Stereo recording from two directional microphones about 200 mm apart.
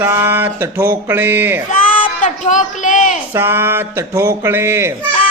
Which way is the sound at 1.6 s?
40° left (ahead or behind).